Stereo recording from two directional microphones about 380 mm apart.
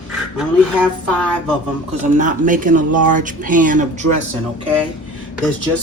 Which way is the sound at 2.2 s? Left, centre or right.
Right.